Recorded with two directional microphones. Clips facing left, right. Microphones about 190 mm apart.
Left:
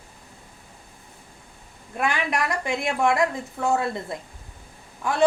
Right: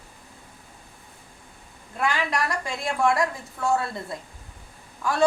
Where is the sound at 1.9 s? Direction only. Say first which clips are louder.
Left 1 dB; 20° left (ahead or behind).